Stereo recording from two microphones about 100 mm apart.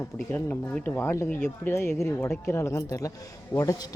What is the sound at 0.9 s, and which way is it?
Speech, 25° left (ahead or behind).